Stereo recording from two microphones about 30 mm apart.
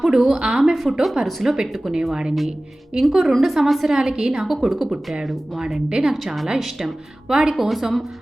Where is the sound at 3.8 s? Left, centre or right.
Right.